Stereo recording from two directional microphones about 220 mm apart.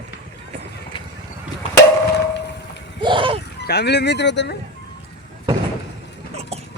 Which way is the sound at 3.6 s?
50° left (ahead or behind).